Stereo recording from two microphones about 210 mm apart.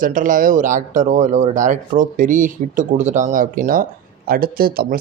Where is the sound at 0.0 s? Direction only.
40° right (ahead or behind).